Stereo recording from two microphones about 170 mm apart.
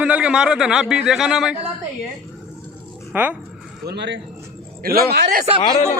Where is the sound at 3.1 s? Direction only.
10° right (ahead or behind).